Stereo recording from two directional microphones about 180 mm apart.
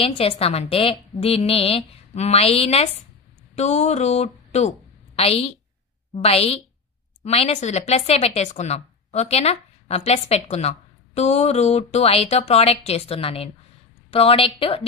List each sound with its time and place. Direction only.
0.0 s a woman's voice: 35° left (ahead or behind)